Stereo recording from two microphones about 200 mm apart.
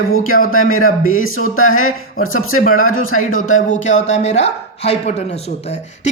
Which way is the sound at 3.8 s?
35° left (ahead or behind).